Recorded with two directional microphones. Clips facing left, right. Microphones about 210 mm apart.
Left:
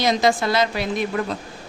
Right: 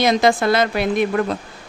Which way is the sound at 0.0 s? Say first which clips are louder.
Right 3 dB; 55° right (ahead or behind).